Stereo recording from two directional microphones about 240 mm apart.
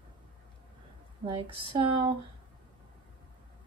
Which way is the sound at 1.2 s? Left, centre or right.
Right.